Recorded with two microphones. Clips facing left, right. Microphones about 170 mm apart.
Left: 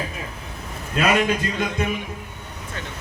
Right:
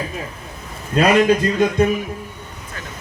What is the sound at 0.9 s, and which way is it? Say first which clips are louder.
Speech: right 5 dB; 35° right (ahead or behind).